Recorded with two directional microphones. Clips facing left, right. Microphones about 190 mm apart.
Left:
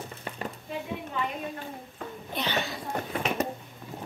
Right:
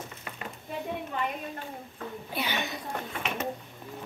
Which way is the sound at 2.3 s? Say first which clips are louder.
Left 2 dB; 10° right (ahead or behind).